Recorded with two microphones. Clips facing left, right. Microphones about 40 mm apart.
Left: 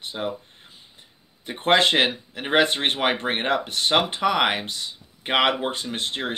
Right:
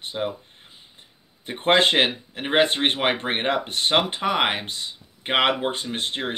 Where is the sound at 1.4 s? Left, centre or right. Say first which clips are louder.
Even; right.